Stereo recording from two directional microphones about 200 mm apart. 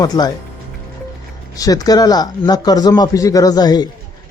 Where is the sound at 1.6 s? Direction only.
20° left (ahead or behind).